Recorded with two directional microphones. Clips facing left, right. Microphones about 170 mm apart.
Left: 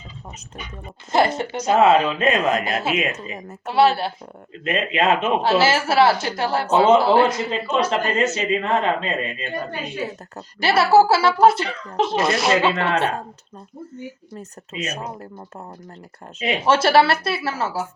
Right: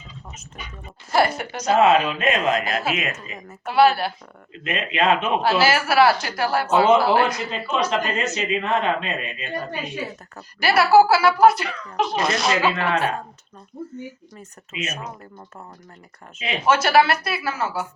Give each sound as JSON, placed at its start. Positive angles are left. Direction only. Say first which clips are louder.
{"t": 1.1, "sound": "speech", "louder": "left 1 dB", "side_deg": 20}
{"t": 10.3, "sound": "speech", "louder": "even", "side_deg": 25}
{"t": 14.7, "sound": "speech", "louder": "left 2 dB", "side_deg": 35}
{"t": 16.4, "sound": "speech", "louder": "left 2 dB", "side_deg": 30}